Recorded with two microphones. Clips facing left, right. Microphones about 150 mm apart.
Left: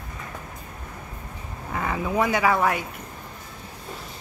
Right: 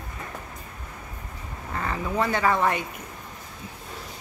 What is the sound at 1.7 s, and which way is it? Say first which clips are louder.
Speech: left 2 dB; 10° left (ahead or behind).